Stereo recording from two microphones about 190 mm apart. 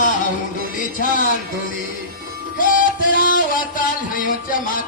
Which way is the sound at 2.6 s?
45° left (ahead or behind).